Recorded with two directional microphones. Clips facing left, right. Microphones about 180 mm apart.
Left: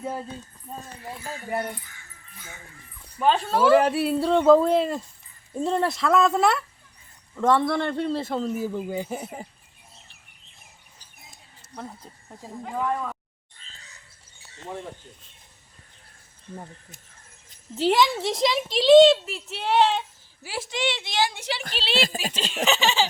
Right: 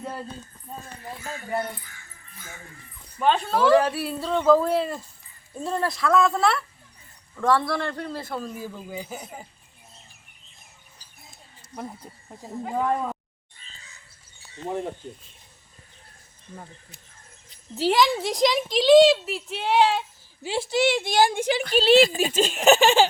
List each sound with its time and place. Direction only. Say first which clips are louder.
3.2 s a woman's voice: even; centre (ahead or behind)
3.8 s speech: left 5 dB; 25° left (ahead or behind)
11.7 s speech: right 2 dB; 10° right (ahead or behind)
12.7 s speech: right 2 dB; 30° right (ahead or behind)
17.7 s a woman's voice: even; centre (ahead or behind)
20.4 s a woman's voice: right 6 dB; 30° right (ahead or behind); by 23.0 s 50° right (ahead or behind)